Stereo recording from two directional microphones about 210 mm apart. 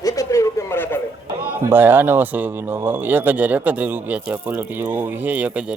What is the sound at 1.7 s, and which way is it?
Speech, 10° right (ahead or behind).